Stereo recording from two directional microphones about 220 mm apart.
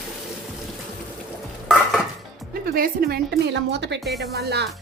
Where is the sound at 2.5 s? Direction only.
40° right (ahead or behind).